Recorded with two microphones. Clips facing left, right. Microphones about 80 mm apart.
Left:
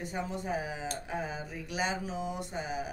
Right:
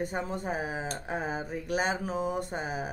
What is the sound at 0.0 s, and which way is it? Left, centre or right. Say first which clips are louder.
Speech: right 4 dB; right.